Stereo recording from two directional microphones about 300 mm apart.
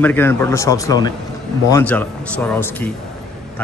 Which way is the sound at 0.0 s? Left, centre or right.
Centre.